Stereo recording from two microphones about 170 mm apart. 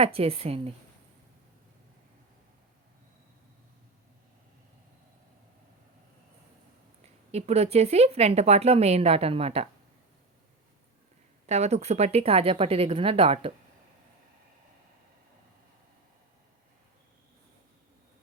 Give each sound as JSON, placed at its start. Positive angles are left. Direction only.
{"t": 0.0, "sound": "a woman's voice", "side_deg": -35}
{"t": 7.3, "sound": "a woman's voice", "side_deg": -40}
{"t": 11.4, "sound": "a woman's voice", "side_deg": -40}